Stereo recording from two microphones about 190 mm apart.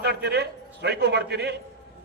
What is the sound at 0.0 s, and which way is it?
A man's voice, 60° right (ahead or behind).